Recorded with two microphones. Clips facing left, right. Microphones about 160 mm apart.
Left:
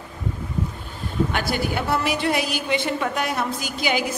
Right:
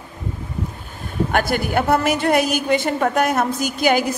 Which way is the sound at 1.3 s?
50° right (ahead or behind).